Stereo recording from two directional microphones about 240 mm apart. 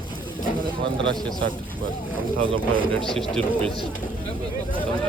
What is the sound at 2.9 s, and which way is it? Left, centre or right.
Speech, centre.